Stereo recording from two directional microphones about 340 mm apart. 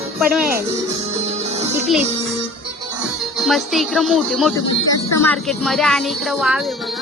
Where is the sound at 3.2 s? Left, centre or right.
Centre.